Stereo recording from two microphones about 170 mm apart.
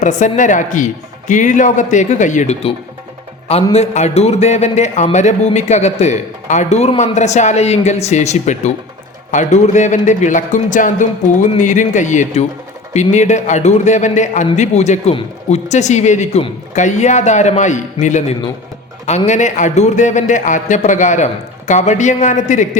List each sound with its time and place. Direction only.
0.0 s a man's voice: 45° left (ahead or behind)